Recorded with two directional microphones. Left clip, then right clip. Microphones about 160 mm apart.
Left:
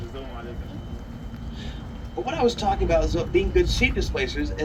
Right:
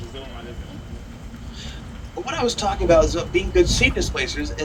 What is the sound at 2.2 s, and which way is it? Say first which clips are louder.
Speech: even; 90° right.